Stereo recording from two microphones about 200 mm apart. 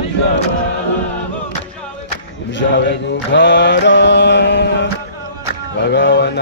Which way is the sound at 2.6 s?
60° left (ahead or behind).